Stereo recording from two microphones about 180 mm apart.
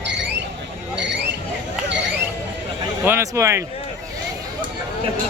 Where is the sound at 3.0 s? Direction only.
15° right (ahead or behind).